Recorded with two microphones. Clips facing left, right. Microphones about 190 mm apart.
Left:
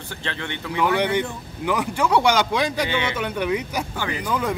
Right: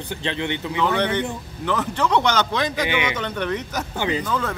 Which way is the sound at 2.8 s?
15° right (ahead or behind).